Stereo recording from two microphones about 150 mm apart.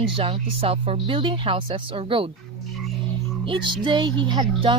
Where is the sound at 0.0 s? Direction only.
35° right (ahead or behind).